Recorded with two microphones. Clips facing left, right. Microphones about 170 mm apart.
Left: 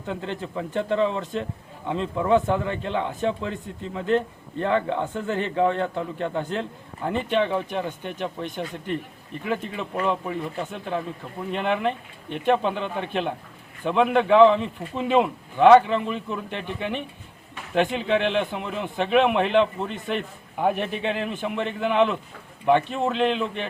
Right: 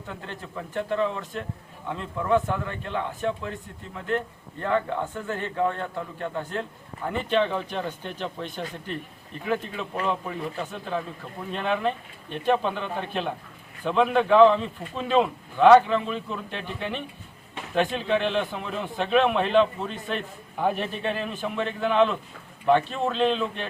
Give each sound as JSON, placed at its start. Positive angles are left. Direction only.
{"t": 0.1, "sound": "a man's voice", "side_deg": 20}